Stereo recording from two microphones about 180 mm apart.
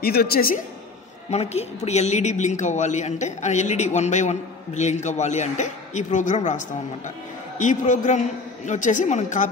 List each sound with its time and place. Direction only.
0.0 s a woman's voice: 60° left (ahead or behind)
1.3 s a woman's voice: 35° left (ahead or behind)